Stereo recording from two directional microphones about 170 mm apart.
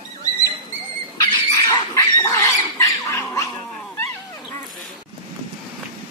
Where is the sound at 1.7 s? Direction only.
25° left (ahead or behind).